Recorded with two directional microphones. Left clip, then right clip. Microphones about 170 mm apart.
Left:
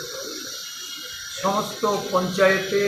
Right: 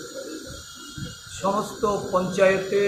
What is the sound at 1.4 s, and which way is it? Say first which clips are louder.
Speech: left 1 dB; 5° right (ahead or behind).